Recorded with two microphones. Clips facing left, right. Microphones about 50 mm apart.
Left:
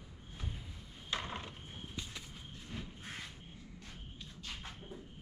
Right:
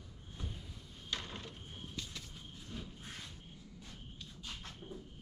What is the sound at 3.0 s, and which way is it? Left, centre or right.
Quack, left.